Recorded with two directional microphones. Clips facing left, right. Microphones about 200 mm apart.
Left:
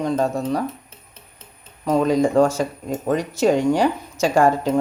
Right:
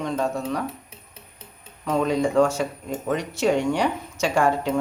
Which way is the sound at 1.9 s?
40° left (ahead or behind).